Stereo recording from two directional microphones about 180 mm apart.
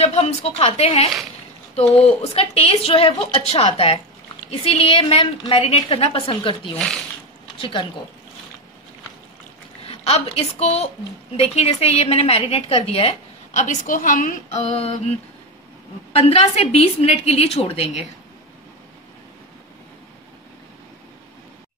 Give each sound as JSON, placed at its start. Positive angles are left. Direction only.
{"t": 0.0, "sound": "a woman's voice", "side_deg": 35}
{"t": 9.8, "sound": "a woman's voice", "side_deg": 35}
{"t": 16.1, "sound": "a woman's voice", "side_deg": 35}